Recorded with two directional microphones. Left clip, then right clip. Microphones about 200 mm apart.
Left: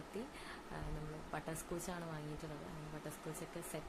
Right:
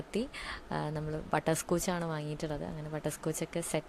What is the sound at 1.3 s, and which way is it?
A woman's voice, 50° right (ahead or behind).